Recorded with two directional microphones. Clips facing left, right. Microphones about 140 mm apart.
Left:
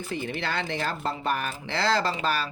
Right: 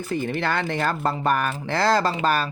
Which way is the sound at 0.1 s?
45° right (ahead or behind).